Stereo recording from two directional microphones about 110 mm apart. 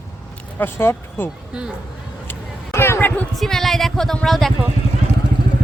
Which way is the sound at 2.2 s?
20° left (ahead or behind).